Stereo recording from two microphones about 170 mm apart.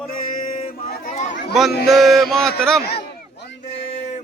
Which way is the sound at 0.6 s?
45° left (ahead or behind).